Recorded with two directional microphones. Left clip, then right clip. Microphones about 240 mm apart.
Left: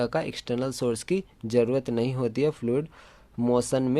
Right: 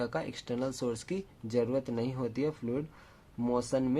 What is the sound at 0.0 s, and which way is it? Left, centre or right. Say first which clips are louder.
Speech: left 7 dB; left.